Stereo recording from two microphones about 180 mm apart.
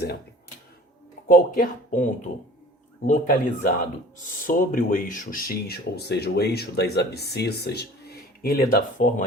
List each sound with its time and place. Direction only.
1.3 s speech: 50° left (ahead or behind)